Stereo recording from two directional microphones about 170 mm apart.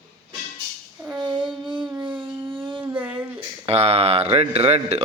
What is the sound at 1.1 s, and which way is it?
Child singing, 25° right (ahead or behind).